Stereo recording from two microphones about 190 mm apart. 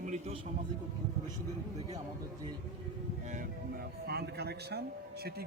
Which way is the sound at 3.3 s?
50° right (ahead or behind).